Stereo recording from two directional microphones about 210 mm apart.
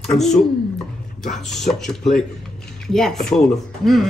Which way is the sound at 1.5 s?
Centre (ahead or behind).